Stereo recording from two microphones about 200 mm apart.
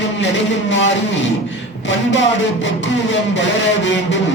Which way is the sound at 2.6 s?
65° left (ahead or behind).